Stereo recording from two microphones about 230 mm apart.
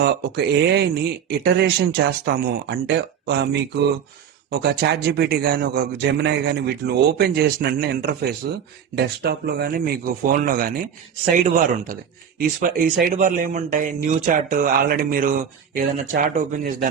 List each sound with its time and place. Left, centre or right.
0.0 s speech: right